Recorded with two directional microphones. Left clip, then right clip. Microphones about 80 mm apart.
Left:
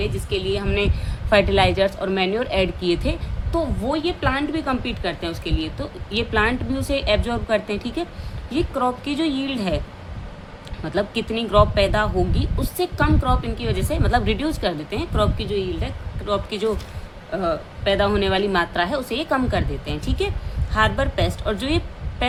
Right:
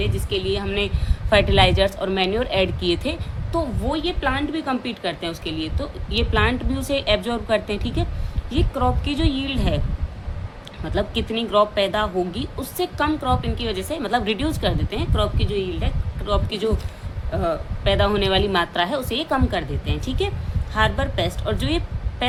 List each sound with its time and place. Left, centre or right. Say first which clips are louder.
0.0 s speech: even; centre
3.6 s speech: left 1 dB; left
4.8 s speech: even; centre
10.8 s speech: left 1 dB; centre
16.6 s speech: left 1 dB; centre
19.1 s speech: left 1 dB; centre
22.2 s music: even; centre